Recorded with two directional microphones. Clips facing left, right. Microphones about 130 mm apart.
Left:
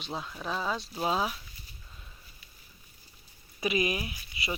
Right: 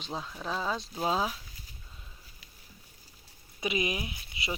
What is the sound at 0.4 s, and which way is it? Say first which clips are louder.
Speech: even; 5° left (ahead or behind).